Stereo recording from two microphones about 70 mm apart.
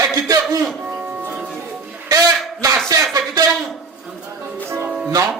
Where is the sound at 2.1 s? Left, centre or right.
Right.